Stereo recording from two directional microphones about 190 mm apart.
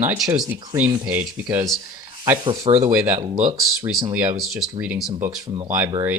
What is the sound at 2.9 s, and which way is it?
Speech, 10° right (ahead or behind).